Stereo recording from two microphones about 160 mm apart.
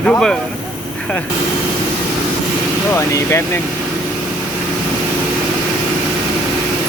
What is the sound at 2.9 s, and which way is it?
Speech, 15° left (ahead or behind).